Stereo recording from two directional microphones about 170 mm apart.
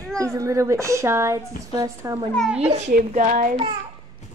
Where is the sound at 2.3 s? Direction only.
Centre (ahead or behind).